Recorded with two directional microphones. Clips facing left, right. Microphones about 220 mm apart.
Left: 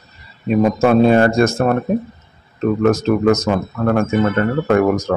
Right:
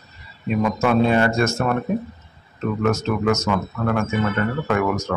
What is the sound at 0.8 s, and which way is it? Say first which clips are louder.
Speech: left 5 dB; 40° left (ahead or behind).